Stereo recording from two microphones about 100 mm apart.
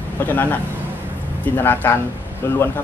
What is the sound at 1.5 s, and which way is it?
Speech, 20° left (ahead or behind).